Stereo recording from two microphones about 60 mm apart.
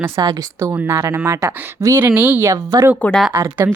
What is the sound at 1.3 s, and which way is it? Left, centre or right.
Speech, right.